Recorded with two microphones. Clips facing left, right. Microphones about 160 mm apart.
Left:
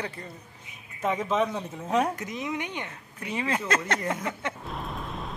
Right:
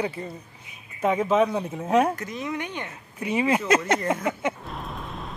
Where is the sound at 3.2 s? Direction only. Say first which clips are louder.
Right 6 dB; 10° right (ahead or behind).